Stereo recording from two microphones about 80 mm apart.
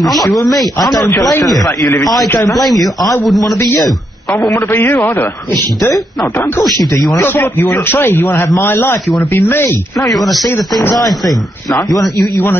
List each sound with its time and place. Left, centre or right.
0.0 s speech: centre
2.5 s speech: centre
3.5 s a man's voice: left
5.5 s speech: centre
7.2 s a man's voice: left
9.9 s speech: centre